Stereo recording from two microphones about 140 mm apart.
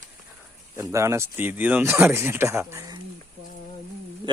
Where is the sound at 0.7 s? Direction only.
20° right (ahead or behind).